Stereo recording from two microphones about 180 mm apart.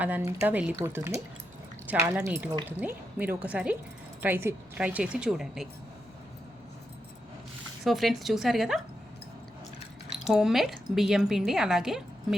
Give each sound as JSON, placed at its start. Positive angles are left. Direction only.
{"t": 0.0, "sound": "a woman's voice", "side_deg": -10}
{"t": 7.9, "sound": "a woman's voice", "side_deg": 0}
{"t": 10.2, "sound": "a woman's voice", "side_deg": -5}